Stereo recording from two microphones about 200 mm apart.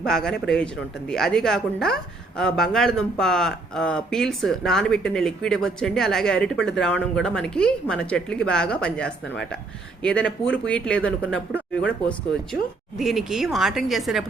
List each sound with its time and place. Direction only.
0.0 s speech: centre (ahead or behind)